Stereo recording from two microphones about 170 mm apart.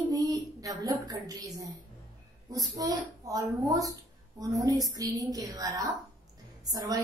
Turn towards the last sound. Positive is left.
turn(degrees=-20)  # may be behind; listen again after turning